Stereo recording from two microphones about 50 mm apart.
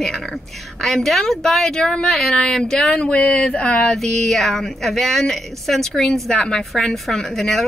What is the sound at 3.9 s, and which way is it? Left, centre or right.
A woman's voice, centre.